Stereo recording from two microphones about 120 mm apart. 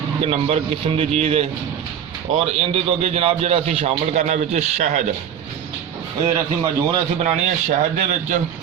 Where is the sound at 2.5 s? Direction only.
55° right (ahead or behind).